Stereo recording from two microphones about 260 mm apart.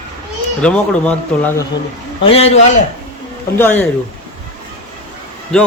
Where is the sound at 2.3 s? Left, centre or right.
Left.